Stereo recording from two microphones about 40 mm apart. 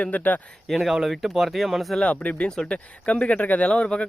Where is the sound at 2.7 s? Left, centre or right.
Left.